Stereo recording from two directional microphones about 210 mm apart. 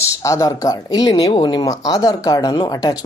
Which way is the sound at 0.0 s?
15° left (ahead or behind).